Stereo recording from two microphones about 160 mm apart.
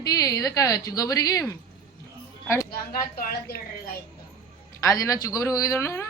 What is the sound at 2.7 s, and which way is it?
Speech, 70° left (ahead or behind).